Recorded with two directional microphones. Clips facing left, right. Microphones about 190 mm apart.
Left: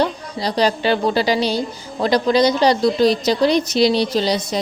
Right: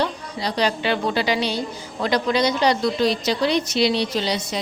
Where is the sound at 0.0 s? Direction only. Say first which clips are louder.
Left 4 dB; 35° left (ahead or behind).